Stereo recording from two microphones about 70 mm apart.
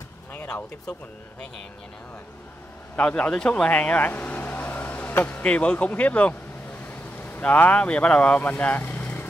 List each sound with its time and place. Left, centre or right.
3.0 s speech: centre